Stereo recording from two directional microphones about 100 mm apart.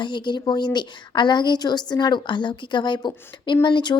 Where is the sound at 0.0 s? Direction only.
50° left (ahead or behind).